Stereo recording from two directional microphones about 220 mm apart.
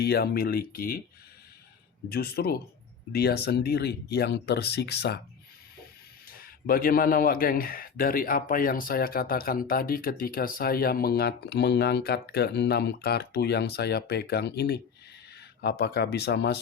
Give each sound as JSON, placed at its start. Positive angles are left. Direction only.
{"t": 0.0, "sound": "speech", "side_deg": 45}
{"t": 2.0, "sound": "speech", "side_deg": 45}
{"t": 6.3, "sound": "a man's voice", "side_deg": 40}
{"t": 15.8, "sound": "speech", "side_deg": 50}